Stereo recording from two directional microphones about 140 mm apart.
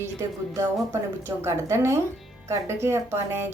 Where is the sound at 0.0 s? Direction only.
20° right (ahead or behind).